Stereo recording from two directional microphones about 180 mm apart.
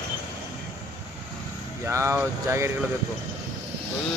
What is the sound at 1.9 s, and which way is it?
Speech, 15° right (ahead or behind).